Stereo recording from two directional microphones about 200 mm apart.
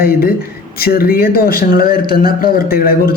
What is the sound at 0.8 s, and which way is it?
A man's voice, 50° left (ahead or behind).